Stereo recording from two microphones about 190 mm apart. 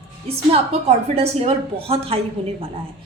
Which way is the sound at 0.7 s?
35° right (ahead or behind).